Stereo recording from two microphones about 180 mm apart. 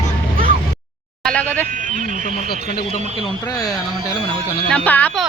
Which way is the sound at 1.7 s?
45° right (ahead or behind).